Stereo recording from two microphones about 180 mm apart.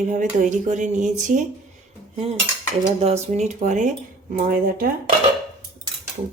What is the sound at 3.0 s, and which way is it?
Dishes, 35° right (ahead or behind).